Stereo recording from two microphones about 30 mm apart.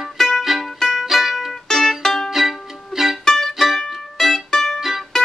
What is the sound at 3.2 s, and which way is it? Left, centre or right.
Music, centre.